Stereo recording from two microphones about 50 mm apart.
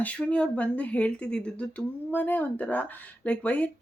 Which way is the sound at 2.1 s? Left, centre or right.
Left.